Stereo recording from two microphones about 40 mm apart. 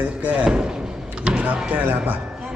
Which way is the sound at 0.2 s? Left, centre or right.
Right.